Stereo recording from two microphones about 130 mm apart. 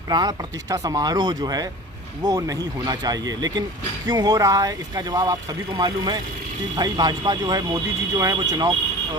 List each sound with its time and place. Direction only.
0.1 s speech: 30° right (ahead or behind)